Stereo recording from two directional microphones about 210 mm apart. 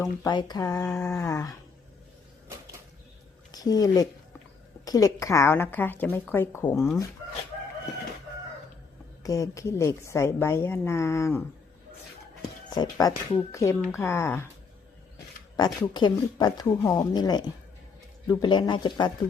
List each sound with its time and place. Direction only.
0.0 s a woman's voice: 20° left (ahead or behind)
3.5 s a woman's voice: 20° left (ahead or behind)
9.2 s a woman's voice: 15° left (ahead or behind)
12.7 s a woman's voice: 20° left (ahead or behind)
15.5 s speech: 20° left (ahead or behind)